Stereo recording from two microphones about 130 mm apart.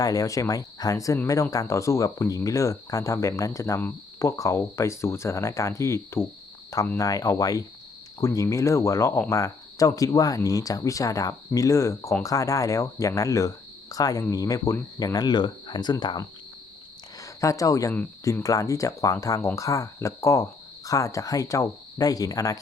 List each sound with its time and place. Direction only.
0.0 s speech: 25° left (ahead or behind)